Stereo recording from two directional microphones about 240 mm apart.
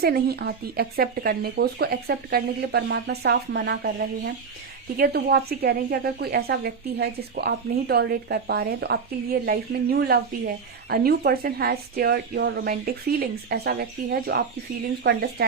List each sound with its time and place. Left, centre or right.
0.0 s a woman's voice: right